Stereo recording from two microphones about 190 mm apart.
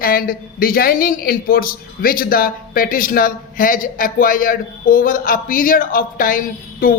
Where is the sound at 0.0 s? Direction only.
50° left (ahead or behind).